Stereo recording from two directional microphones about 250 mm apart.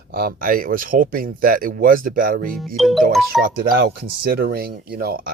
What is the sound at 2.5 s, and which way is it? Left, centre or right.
Speech, centre.